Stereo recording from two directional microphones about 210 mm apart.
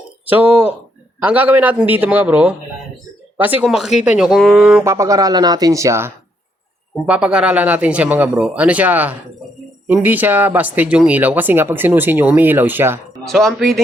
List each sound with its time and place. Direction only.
0.3 s speech: 10° right (ahead or behind)
4.8 s speech: 15° right (ahead or behind)
13.1 s speech: centre (ahead or behind)